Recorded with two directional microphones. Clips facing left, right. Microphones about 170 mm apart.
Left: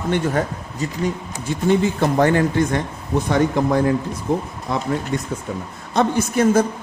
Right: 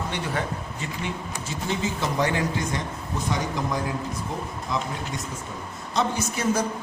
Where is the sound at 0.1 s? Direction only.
40° left (ahead or behind).